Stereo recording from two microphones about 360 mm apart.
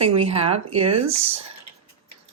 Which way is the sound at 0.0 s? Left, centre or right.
Centre.